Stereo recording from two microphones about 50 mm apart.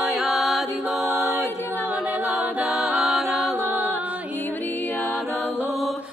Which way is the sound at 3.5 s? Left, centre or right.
Right.